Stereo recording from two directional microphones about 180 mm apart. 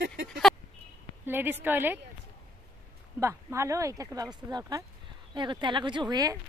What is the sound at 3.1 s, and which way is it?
Speech, 15° right (ahead or behind).